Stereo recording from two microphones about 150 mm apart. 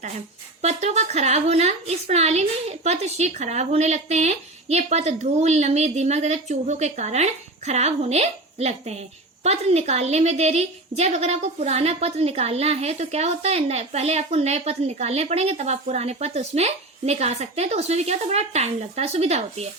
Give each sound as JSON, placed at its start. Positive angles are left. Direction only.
{"t": 0.6, "sound": "a woman's voice", "side_deg": -45}